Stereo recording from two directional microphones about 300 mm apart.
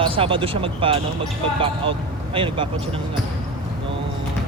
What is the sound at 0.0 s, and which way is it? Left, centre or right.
Speech, centre.